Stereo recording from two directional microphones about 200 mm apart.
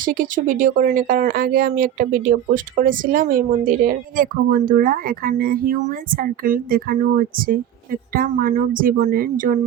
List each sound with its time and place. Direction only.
0.0 s speech: 45° right (ahead or behind)